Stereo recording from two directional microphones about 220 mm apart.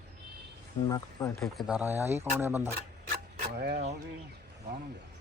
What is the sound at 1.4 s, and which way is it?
Speech, centre (ahead or behind).